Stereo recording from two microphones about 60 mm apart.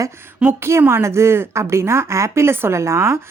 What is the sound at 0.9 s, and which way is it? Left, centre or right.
Speech, right.